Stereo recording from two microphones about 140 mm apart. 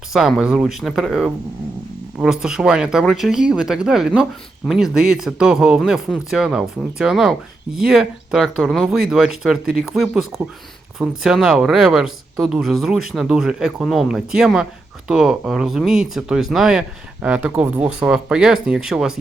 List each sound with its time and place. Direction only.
0.1 s speech: 5° right (ahead or behind)